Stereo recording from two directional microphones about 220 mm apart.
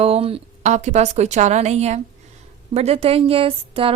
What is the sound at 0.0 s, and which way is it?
A woman's voice, 25° right (ahead or behind).